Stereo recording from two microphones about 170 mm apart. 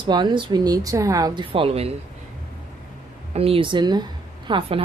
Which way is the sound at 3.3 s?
35° right (ahead or behind).